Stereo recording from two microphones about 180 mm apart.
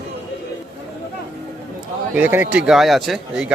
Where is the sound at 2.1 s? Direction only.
10° right (ahead or behind).